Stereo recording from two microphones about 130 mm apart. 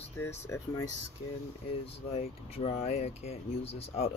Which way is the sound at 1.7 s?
50° left (ahead or behind).